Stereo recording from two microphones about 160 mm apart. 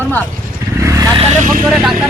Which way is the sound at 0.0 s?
10° left (ahead or behind).